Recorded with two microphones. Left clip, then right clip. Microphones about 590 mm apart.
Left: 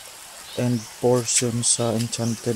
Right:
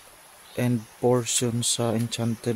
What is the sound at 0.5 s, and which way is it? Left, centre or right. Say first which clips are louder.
Speech: left 2 dB; right.